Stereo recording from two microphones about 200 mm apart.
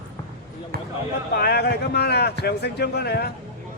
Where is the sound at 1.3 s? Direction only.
55° left (ahead or behind).